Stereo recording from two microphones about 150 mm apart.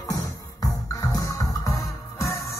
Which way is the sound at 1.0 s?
20° left (ahead or behind).